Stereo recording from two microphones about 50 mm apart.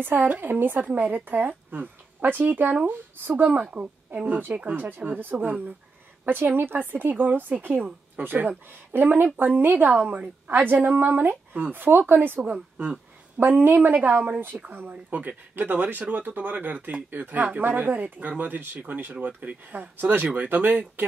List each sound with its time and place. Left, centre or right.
0.0 s a woman's voice: right